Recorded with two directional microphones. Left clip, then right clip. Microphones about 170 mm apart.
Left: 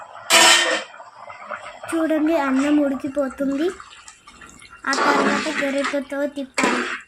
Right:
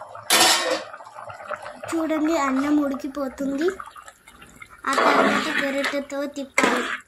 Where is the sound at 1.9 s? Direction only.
10° right (ahead or behind).